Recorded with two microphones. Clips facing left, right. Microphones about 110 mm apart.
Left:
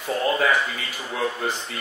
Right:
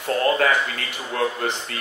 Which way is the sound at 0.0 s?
Centre (ahead or behind).